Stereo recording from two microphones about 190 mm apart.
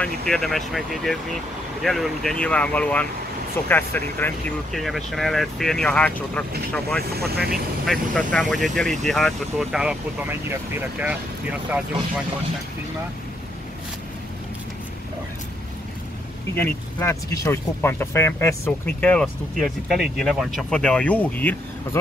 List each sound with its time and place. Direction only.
0.0 s speech: centre (ahead or behind)
7.0 s speech: 55° right (ahead or behind)
7.8 s speech: centre (ahead or behind)
16.5 s speech: 15° left (ahead or behind)